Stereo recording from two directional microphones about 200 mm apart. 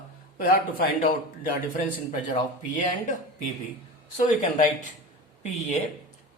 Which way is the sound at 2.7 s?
40° left (ahead or behind).